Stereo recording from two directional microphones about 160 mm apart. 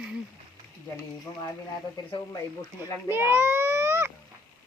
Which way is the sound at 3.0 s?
15° right (ahead or behind).